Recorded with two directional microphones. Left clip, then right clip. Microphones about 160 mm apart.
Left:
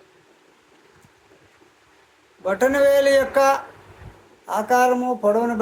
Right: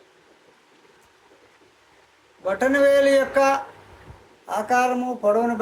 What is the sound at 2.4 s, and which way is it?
Speech, 25° left (ahead or behind).